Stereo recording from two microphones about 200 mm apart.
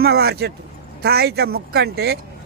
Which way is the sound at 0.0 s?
50° right (ahead or behind).